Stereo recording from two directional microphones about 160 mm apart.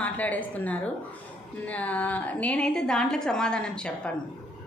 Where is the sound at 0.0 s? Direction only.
10° left (ahead or behind).